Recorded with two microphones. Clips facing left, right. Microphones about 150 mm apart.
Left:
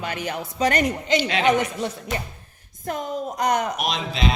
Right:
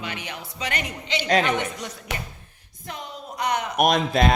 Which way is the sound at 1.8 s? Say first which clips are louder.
Left 8 dB; 35° left (ahead or behind).